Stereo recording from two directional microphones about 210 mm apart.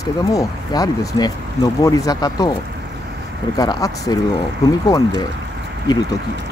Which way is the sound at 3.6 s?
15° left (ahead or behind).